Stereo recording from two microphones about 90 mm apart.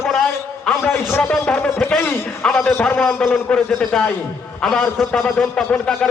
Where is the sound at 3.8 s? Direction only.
5° left (ahead or behind).